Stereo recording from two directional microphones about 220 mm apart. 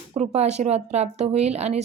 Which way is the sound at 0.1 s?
30° right (ahead or behind).